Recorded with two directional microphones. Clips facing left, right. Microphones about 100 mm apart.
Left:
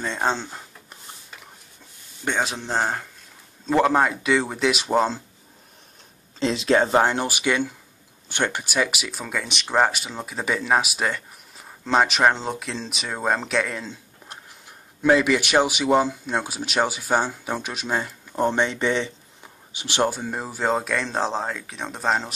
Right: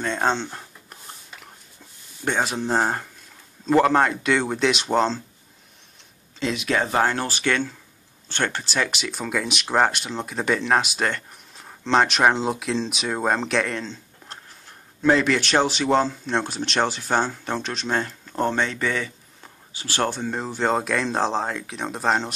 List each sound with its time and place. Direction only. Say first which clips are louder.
0.0 s speech: right 2 dB; centre (ahead or behind)
2.2 s speech: right 2 dB; 5° right (ahead or behind)
6.4 s speech: left 4 dB; 30° left (ahead or behind)
20.1 s speech: right 1 dB; 5° left (ahead or behind)